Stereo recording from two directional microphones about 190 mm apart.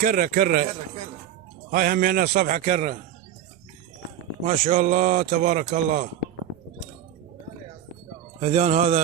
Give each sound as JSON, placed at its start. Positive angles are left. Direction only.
{"t": 0.0, "sound": "a man's voice", "side_deg": -50}
{"t": 1.7, "sound": "a man's voice", "side_deg": -45}
{"t": 4.4, "sound": "speech", "side_deg": -40}
{"t": 8.4, "sound": "speech", "side_deg": -35}